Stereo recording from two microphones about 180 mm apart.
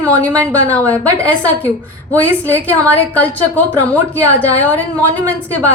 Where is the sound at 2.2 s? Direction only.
15° right (ahead or behind).